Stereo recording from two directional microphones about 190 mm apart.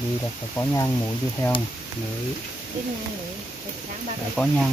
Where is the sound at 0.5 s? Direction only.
15° left (ahead or behind).